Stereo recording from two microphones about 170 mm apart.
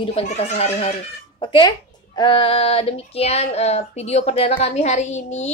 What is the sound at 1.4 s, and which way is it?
Speech, 25° left (ahead or behind).